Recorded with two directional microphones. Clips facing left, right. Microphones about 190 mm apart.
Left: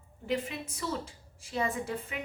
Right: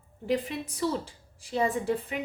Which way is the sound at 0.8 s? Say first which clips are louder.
Right 6 dB; 35° right (ahead or behind).